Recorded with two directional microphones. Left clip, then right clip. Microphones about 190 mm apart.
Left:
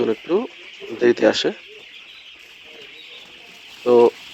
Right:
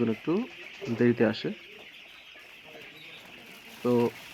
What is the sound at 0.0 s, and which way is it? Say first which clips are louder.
Speech: left 9 dB; 45° left (ahead or behind).